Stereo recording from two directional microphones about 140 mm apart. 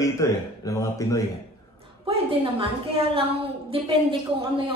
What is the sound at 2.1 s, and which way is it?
A woman's voice, 40° right (ahead or behind).